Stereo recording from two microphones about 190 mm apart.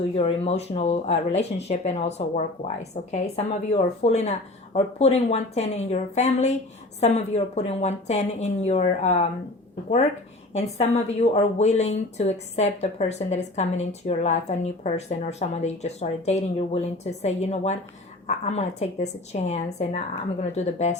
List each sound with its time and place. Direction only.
0.2 s a woman's voice: 30° left (ahead or behind)
10.5 s a woman's voice: 35° left (ahead or behind)